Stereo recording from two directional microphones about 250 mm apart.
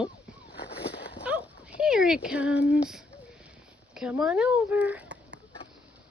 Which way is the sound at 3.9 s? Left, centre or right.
Centre.